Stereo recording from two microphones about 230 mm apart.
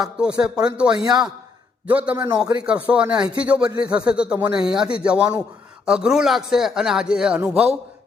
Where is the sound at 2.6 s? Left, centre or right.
Centre.